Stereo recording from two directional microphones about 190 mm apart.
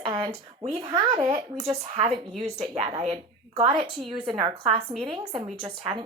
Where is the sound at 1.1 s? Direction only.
35° right (ahead or behind).